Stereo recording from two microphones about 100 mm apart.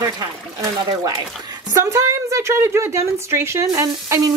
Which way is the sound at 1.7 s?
35° right (ahead or behind).